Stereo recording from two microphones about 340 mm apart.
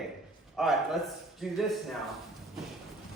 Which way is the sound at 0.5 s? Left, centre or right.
Centre.